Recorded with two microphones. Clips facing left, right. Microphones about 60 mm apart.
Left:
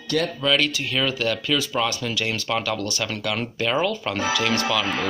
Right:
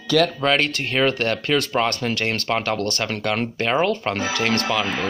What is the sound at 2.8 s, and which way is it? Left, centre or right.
Speech, right.